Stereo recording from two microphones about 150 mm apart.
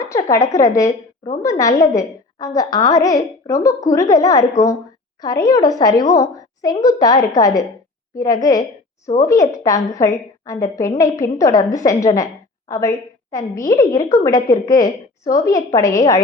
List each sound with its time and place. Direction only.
0.0 s a woman's voice: 20° left (ahead or behind)